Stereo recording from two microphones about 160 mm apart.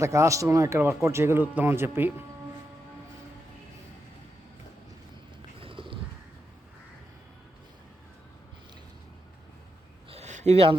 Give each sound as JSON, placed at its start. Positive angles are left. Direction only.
{"t": 0.0, "sound": "speech", "side_deg": -20}
{"t": 5.5, "sound": "crow", "side_deg": -35}
{"t": 10.1, "sound": "a sound", "side_deg": -45}